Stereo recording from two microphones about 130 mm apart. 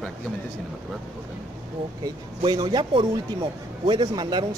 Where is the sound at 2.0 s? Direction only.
35° right (ahead or behind).